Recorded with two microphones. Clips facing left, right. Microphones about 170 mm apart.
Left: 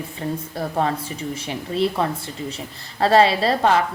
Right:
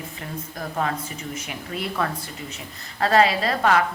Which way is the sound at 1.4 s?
30° left (ahead or behind).